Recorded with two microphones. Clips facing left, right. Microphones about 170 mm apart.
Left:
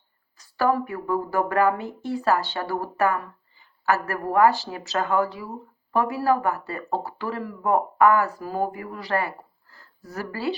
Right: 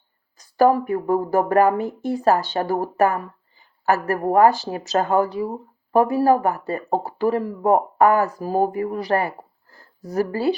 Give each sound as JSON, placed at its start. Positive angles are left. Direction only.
{"t": 0.5, "sound": "speech", "side_deg": -45}
{"t": 5.2, "sound": "speech", "side_deg": -20}
{"t": 5.9, "sound": "speech", "side_deg": -45}
{"t": 7.0, "sound": "speech", "side_deg": -20}
{"t": 7.7, "sound": "speech", "side_deg": -40}